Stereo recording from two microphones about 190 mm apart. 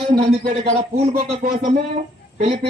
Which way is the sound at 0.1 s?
30° right (ahead or behind).